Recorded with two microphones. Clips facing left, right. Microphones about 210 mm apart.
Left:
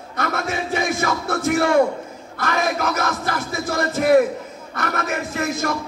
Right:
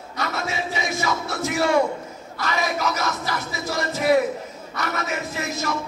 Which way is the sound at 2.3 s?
55° left (ahead or behind).